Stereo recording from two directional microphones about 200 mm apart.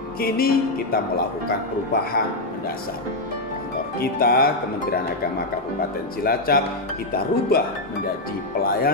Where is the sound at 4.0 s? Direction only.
50° left (ahead or behind).